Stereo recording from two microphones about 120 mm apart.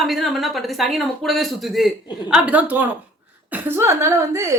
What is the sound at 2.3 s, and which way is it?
A woman's voice, 10° right (ahead or behind).